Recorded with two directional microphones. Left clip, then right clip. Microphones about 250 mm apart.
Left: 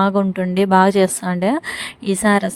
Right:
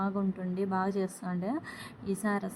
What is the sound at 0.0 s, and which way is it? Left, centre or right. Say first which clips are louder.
A woman's voice: left 17 dB; left.